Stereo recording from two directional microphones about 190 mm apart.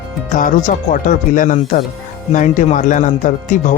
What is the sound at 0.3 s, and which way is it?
Speech, 45° left (ahead or behind).